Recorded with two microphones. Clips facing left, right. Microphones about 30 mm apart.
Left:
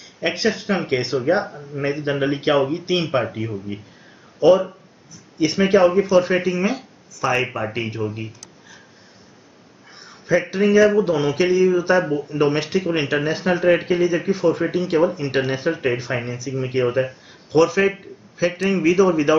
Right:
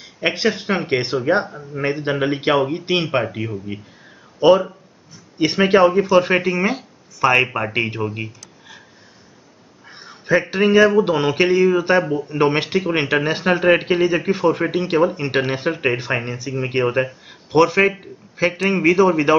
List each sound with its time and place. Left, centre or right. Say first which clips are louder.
0.2 s speech: right 2 dB; right
4.4 s speech: right 1 dB; right
8.0 s speech: right 2 dB; right
9.9 s a sound: right 2 dB; right
10.5 s speech: right 1 dB; right